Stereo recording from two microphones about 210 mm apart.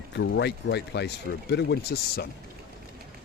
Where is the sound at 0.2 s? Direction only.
55° left (ahead or behind).